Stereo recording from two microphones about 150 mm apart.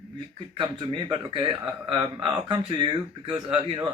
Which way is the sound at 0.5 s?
30° right (ahead or behind).